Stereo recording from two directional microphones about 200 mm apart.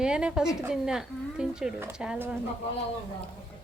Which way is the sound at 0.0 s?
5° right (ahead or behind).